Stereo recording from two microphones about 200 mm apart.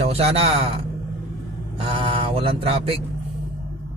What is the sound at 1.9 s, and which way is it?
Speech, 25° right (ahead or behind).